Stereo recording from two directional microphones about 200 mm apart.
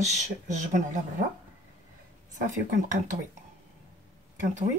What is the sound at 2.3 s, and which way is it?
Speech, 40° right (ahead or behind).